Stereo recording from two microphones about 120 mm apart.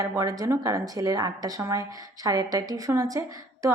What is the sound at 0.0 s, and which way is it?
A woman's voice, 30° right (ahead or behind).